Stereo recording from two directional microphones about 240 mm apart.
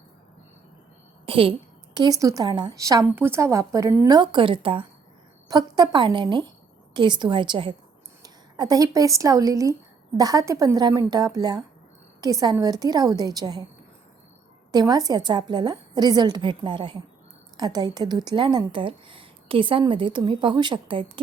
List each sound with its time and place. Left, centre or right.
1.2 s a woman's voice: right
14.7 s a woman's voice: centre